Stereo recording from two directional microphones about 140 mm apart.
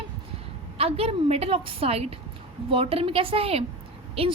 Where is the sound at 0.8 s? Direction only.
45° right (ahead or behind).